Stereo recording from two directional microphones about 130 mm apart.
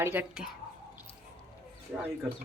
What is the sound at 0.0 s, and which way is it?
Speech, 15° right (ahead or behind).